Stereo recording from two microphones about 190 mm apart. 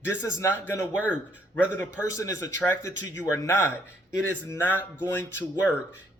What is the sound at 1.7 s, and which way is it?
Speech, 15° left (ahead or behind).